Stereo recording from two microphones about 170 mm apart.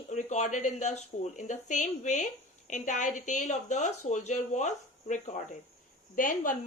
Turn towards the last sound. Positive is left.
turn(degrees=50)  # may be behind; listen again after turning